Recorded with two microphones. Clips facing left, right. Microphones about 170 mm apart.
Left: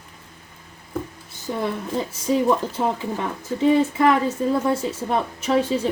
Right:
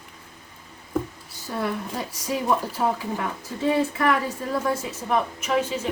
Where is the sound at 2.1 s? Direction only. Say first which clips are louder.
Left 5 dB; 25° left (ahead or behind).